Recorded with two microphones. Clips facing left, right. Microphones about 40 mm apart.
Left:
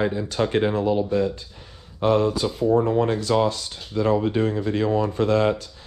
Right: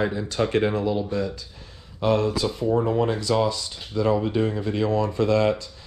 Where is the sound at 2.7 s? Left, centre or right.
Centre.